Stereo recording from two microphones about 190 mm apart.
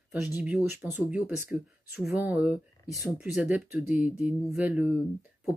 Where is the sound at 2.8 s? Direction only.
15° left (ahead or behind).